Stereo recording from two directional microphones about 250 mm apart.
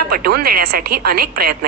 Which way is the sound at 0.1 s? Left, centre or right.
Right.